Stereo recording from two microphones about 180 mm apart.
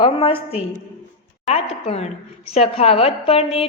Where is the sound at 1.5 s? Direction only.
35° left (ahead or behind).